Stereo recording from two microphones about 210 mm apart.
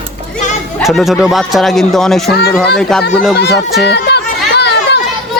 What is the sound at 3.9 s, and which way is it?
Children playing, 50° left (ahead or behind).